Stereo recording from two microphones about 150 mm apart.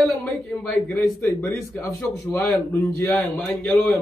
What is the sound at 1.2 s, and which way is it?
A man's voice, 15° left (ahead or behind).